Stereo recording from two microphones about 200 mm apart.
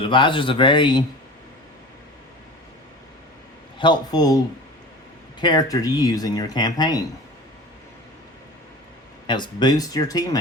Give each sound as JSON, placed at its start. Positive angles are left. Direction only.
{"t": 0.0, "sound": "speech", "side_deg": 25}
{"t": 3.8, "sound": "speech", "side_deg": 20}
{"t": 5.4, "sound": "speech", "side_deg": 20}
{"t": 9.2, "sound": "speech", "side_deg": 20}